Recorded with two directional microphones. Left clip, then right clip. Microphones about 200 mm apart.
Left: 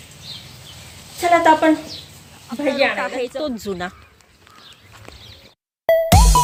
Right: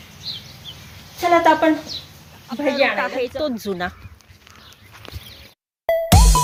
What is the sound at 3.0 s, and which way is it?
Speech, 10° right (ahead or behind).